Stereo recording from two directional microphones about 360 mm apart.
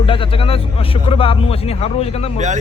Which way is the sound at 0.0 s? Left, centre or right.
Centre.